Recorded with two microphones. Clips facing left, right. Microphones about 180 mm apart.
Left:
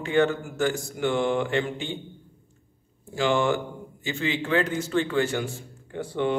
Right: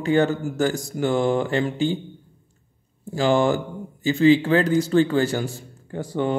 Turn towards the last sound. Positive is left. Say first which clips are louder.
# right 2 dB
turn(degrees=-40)  # may be behind; listen again after turning